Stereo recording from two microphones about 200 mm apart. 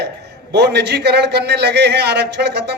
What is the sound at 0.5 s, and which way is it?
A man's voice, 55° right (ahead or behind).